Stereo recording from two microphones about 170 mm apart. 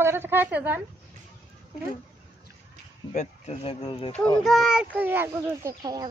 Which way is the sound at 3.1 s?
45° left (ahead or behind).